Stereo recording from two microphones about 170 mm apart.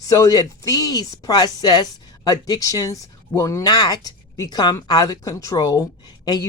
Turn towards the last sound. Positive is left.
turn(degrees=20)  # may be behind; listen again after turning